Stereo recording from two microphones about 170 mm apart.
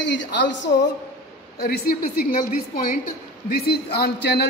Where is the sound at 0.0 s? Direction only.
90° left.